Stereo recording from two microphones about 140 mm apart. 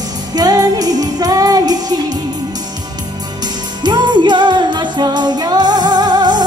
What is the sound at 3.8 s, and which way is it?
Music, 30° right (ahead or behind).